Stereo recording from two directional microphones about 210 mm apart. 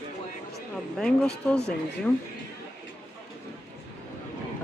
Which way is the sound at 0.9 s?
5° left (ahead or behind).